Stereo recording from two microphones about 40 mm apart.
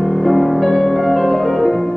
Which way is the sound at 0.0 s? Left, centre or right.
Centre.